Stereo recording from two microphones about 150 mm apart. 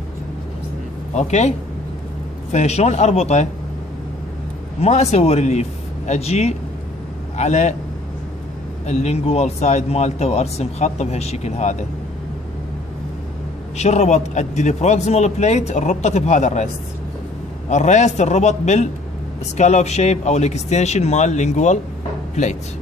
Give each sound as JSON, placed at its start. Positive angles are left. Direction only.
{"t": 1.1, "sound": "speech", "side_deg": 50}
{"t": 2.5, "sound": "speech", "side_deg": 45}
{"t": 4.8, "sound": "speech", "side_deg": 45}
{"t": 8.8, "sound": "speech", "side_deg": 45}
{"t": 13.7, "sound": "speech", "side_deg": 45}
{"t": 17.6, "sound": "speech", "side_deg": 50}